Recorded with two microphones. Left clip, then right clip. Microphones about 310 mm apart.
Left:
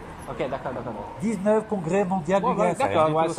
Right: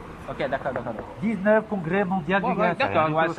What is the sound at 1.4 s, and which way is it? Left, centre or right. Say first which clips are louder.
A man's voice: right 2 dB; centre.